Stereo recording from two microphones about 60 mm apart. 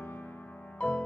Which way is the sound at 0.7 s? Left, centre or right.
Left.